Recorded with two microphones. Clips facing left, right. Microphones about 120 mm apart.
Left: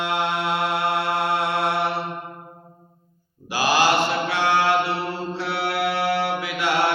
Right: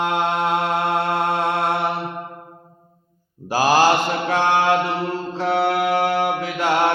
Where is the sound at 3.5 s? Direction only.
40° right (ahead or behind).